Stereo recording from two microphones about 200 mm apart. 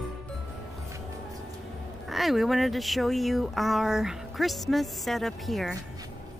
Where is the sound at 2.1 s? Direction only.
Centre (ahead or behind).